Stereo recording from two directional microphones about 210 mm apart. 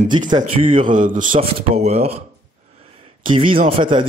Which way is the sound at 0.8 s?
40° right (ahead or behind).